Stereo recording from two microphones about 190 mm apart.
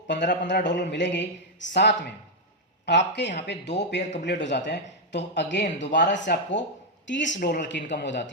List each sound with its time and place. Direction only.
0.1 s a man's voice: 70° left (ahead or behind)
7.4 s speech: 45° left (ahead or behind)
7.7 s a man's voice: 70° left (ahead or behind)